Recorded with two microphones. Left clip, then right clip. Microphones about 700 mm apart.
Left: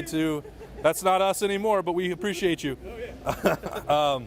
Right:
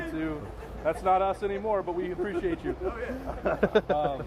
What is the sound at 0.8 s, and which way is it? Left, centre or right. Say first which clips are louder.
Speech: left 3 dB; left.